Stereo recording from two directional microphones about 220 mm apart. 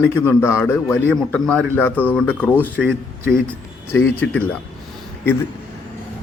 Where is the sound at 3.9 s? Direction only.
10° left (ahead or behind).